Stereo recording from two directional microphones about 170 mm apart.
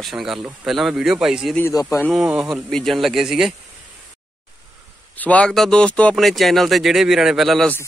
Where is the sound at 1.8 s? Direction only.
15° left (ahead or behind).